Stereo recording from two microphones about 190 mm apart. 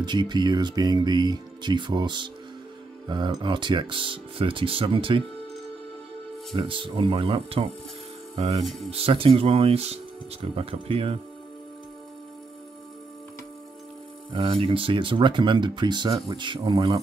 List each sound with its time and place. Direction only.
0.0 s speech: 25° right (ahead or behind)
6.5 s speech: 25° right (ahead or behind)
8.9 s speech: 30° right (ahead or behind)
14.3 s speech: 30° right (ahead or behind)